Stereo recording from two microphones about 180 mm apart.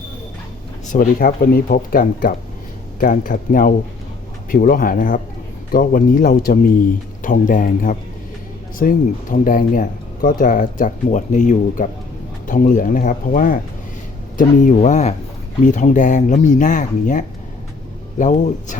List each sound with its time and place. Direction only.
0.9 s speech: 50° left (ahead or behind)